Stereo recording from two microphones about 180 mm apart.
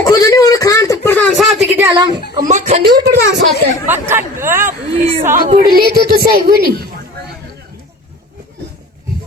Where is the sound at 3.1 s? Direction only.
85° right.